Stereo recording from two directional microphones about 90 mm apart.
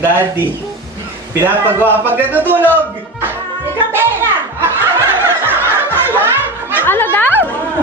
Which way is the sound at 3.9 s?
25° right (ahead or behind).